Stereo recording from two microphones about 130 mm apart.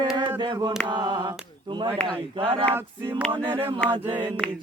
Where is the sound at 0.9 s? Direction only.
35° right (ahead or behind).